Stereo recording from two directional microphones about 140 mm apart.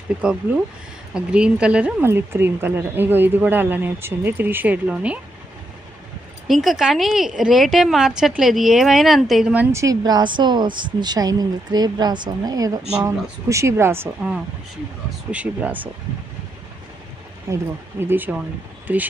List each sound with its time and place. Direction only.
0.2 s a woman's voice: 5° right (ahead or behind)
6.5 s a woman's voice: centre (ahead or behind)
9.7 s speech: 25° right (ahead or behind)
15.3 s a woman's voice: 10° right (ahead or behind)
17.5 s a woman's voice: 20° right (ahead or behind)